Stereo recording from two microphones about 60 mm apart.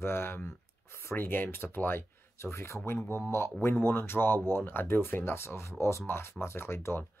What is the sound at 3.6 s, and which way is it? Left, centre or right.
Speech, left.